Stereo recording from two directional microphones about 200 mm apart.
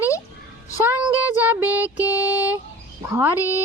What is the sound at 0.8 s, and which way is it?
Child singing, 10° right (ahead or behind).